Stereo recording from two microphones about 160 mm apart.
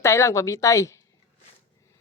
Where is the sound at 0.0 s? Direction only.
20° left (ahead or behind).